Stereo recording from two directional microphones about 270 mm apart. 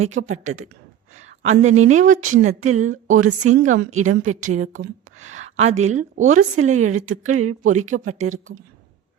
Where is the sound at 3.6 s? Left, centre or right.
Right.